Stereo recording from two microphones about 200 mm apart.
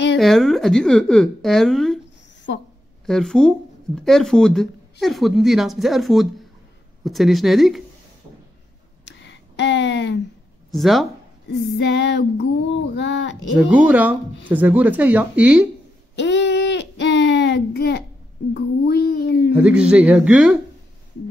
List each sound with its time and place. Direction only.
0.2 s a woman's voice: centre (ahead or behind)
2.5 s a woman's voice: 70° left (ahead or behind)
3.1 s a woman's voice: centre (ahead or behind)
9.0 s a sound: 60° left (ahead or behind)
10.7 s speech: centre (ahead or behind)
11.4 s child singing: 60° left (ahead or behind)
13.6 s speech: 5° right (ahead or behind)
16.2 s child singing: 60° left (ahead or behind)
19.5 s a woman's voice: 5° right (ahead or behind)